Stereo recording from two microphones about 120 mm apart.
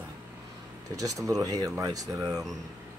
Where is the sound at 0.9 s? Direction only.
30° right (ahead or behind).